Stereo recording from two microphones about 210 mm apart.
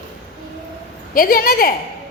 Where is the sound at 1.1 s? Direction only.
45° left (ahead or behind).